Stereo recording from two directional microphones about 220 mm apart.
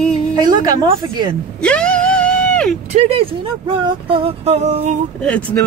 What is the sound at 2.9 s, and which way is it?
Speech, 30° right (ahead or behind).